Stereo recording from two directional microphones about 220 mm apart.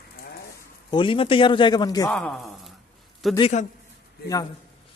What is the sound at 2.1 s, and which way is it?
Speech, 5° left (ahead or behind).